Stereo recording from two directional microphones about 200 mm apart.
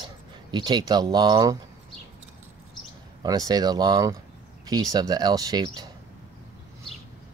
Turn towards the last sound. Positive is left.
turn(degrees=-20)  # may be behind; listen again after turning